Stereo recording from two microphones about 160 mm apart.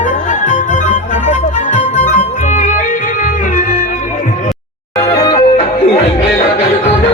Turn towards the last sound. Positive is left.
turn(degrees=25)  # may be behind; listen again after turning